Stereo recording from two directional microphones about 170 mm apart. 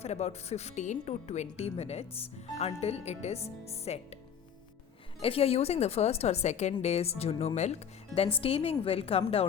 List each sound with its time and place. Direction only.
0.0 s speech: 40° left (ahead or behind)
5.2 s speech: 35° left (ahead or behind)